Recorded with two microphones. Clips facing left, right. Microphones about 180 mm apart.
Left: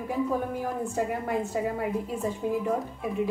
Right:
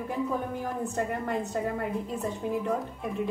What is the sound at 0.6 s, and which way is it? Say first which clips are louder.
A woman's voice: left 2 dB; 5° left (ahead or behind).